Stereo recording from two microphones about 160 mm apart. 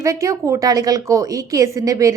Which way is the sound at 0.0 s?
20° right (ahead or behind).